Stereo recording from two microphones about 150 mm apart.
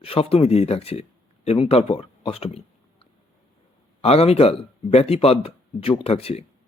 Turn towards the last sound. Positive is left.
turn(degrees=40)  # may be behind; listen again after turning